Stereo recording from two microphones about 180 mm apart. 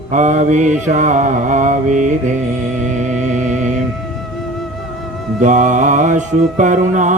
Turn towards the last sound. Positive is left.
turn(degrees=-45)  # may be behind; listen again after turning